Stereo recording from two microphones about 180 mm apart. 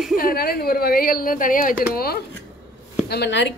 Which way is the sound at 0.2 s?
55° left (ahead or behind).